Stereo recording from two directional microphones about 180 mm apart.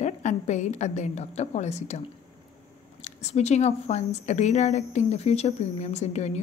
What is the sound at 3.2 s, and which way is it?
A woman's voice, 40° left (ahead or behind).